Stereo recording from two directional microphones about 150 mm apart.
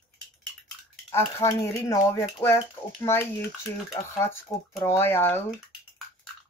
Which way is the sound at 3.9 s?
15° left (ahead or behind).